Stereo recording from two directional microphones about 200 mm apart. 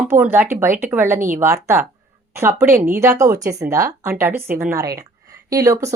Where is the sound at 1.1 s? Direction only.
40° right (ahead or behind).